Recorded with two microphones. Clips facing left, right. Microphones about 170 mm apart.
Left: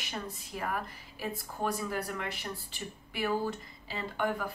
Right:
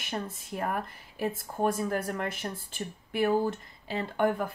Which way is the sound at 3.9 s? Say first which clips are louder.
Right 5 dB; 50° right (ahead or behind).